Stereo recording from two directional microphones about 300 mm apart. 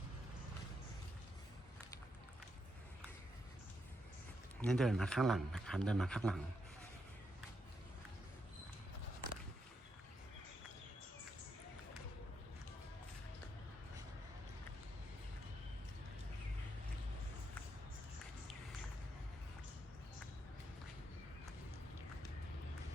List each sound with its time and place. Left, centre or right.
4.6 s a man's voice: centre